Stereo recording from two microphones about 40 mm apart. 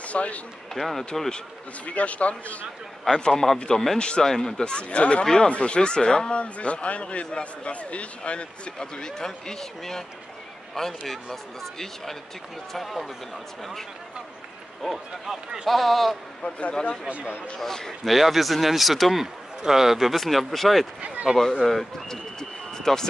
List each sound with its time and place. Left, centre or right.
0.0 s speech: left
0.7 s speech: centre
1.9 s a man's voice: left
3.2 s speech: centre
5.2 s speech: centre
6.3 s a man's voice: left; by 13.1 s centre
14.8 s speech: centre
16.4 s a man's voice: left
17.6 s speech: centre
18.0 s speech: centre
21.6 s speech: centre